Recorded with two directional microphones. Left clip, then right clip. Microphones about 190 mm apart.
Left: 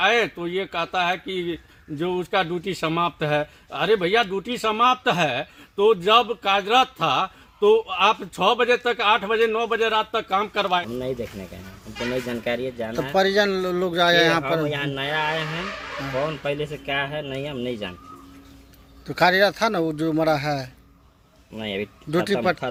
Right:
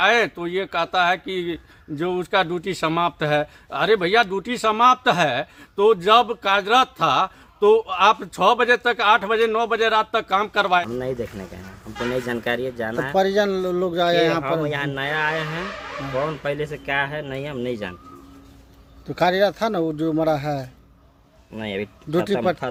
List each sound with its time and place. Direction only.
0.0 s speech: 10° right (ahead or behind)
12.3 s speech: 5° right (ahead or behind)
19.0 s speech: 5° right (ahead or behind)